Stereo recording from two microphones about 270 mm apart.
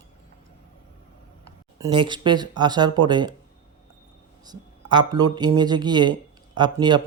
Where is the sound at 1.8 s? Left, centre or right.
Centre.